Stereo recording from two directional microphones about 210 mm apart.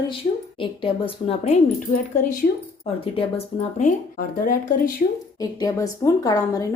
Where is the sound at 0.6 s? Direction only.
25° left (ahead or behind).